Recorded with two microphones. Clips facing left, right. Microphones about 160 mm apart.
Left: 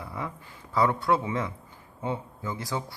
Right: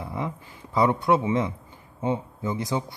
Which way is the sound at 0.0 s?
20° right (ahead or behind).